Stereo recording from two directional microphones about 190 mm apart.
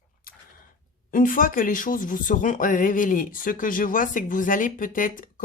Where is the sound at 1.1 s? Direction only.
45° left (ahead or behind).